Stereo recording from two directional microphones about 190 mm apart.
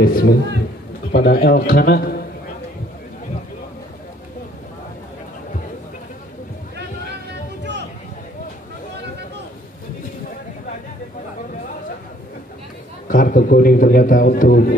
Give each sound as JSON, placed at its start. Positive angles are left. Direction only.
{"t": 0.0, "sound": "a man's voice", "side_deg": 50}
{"t": 13.1, "sound": "a man's voice", "side_deg": 45}